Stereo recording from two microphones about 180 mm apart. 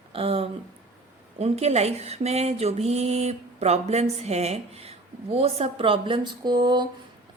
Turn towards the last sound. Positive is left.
turn(degrees=-25)  # may be behind; listen again after turning